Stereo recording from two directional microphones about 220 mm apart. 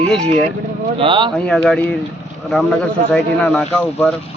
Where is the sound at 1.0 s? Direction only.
20° right (ahead or behind).